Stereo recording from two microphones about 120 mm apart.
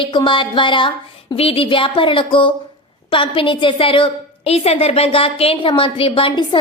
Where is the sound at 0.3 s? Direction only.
45° left (ahead or behind).